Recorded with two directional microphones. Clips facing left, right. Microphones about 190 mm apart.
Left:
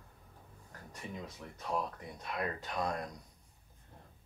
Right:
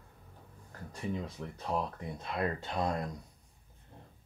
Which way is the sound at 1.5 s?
25° right (ahead or behind).